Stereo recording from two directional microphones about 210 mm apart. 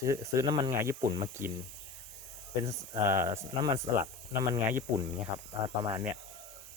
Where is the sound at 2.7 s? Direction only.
15° right (ahead or behind).